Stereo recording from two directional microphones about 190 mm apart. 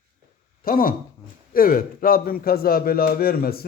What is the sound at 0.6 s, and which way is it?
A man's voice, 50° left (ahead or behind).